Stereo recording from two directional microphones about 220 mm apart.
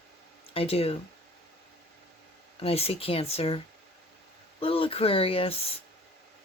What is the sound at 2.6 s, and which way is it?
Speech, 25° left (ahead or behind).